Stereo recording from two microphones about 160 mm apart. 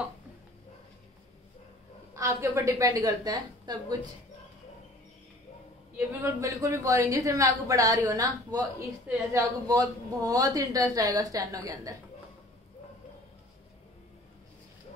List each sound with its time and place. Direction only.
2.1 s a woman's voice: 20° right (ahead or behind)
5.9 s a woman's voice: 15° right (ahead or behind)